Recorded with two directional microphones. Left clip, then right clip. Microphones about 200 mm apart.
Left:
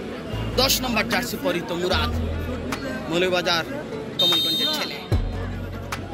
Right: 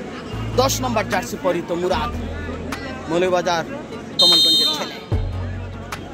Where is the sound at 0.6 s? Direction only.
35° right (ahead or behind).